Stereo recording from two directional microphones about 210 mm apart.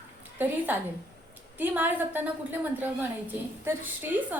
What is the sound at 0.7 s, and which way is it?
A woman's voice, 10° right (ahead or behind).